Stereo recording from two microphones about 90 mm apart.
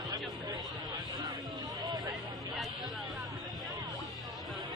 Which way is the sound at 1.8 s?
45° right (ahead or behind).